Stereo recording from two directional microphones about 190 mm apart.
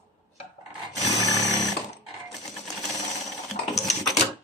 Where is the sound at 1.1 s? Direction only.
20° left (ahead or behind).